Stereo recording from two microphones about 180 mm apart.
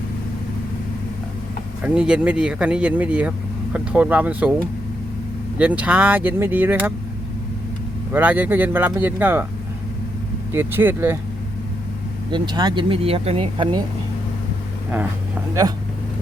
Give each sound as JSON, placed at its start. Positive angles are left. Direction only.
{"t": 1.8, "sound": "speech", "side_deg": -5}
{"t": 5.5, "sound": "speech", "side_deg": -5}
{"t": 8.1, "sound": "speech", "side_deg": -10}
{"t": 10.5, "sound": "speech", "side_deg": -10}
{"t": 12.3, "sound": "speech", "side_deg": -25}